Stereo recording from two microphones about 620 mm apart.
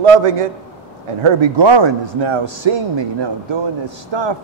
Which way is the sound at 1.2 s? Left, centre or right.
Right.